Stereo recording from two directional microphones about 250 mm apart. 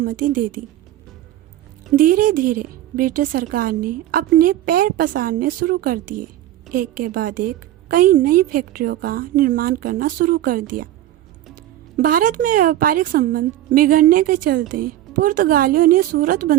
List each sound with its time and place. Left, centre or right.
0.0 s a woman's voice: right
2.0 s a woman's voice: right
11.9 s a woman's voice: right